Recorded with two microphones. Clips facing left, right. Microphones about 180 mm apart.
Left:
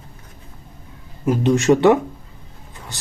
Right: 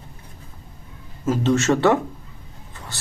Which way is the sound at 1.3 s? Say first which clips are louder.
Left 3 dB; 15° left (ahead or behind).